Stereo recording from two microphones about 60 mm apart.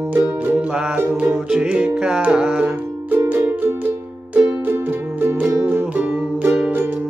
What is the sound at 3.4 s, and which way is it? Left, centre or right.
Music, right.